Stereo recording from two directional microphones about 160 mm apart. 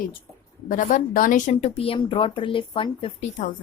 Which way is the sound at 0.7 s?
55° left (ahead or behind).